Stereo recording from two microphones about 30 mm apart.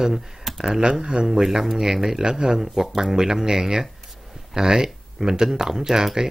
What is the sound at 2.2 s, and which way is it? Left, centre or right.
Speech, right.